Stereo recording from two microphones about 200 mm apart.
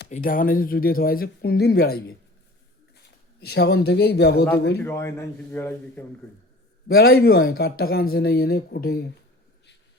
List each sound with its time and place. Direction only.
0.1 s speech: 45° left (ahead or behind)
4.8 s a man's voice: 10° left (ahead or behind)
6.8 s speech: 50° left (ahead or behind)